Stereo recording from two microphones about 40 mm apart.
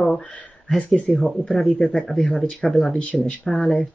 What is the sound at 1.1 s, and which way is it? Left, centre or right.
Speech, left.